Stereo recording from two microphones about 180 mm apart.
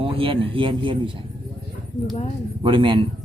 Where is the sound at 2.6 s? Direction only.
30° right (ahead or behind).